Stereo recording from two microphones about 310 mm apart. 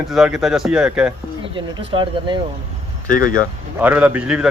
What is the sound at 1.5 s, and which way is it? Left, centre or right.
Speech, centre.